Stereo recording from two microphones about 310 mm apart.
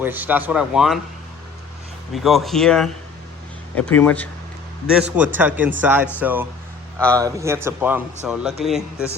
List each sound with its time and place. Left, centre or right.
0.0 s speech: centre
2.1 s speech: centre